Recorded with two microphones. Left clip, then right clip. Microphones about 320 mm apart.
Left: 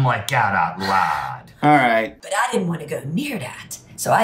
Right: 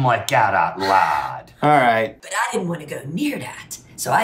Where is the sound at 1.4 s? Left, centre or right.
Centre.